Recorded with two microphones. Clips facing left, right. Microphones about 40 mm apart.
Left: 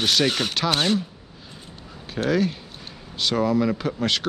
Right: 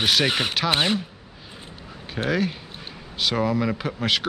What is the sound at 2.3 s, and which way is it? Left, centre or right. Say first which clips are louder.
Speech: left 2 dB; centre.